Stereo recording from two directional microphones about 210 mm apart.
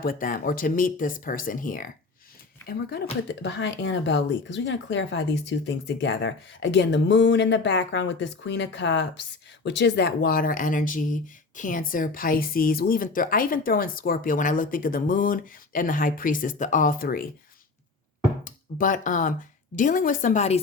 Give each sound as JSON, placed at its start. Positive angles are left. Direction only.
{"t": 0.0, "sound": "speech", "side_deg": 40}
{"t": 3.4, "sound": "speech", "side_deg": 55}
{"t": 18.4, "sound": "speech", "side_deg": 40}